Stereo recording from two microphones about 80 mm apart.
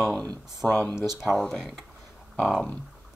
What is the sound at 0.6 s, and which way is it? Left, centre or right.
Speech, left.